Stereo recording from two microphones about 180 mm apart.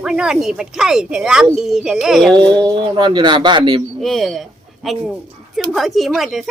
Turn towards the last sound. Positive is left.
turn(degrees=0)  # may be behind; listen again after turning